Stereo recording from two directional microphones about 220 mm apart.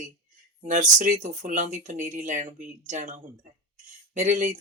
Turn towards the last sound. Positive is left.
turn(degrees=-35)  # may be behind; listen again after turning